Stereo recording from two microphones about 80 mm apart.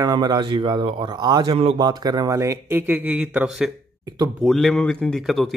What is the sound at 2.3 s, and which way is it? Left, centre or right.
Speech, right.